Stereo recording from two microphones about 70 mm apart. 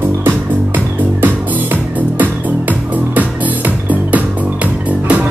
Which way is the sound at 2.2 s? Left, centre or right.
Right.